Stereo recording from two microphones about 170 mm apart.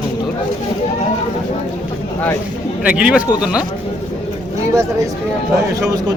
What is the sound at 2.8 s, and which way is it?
Speech, 5° right (ahead or behind).